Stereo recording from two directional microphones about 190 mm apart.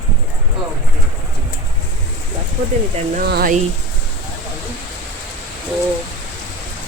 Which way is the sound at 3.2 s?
55° right (ahead or behind).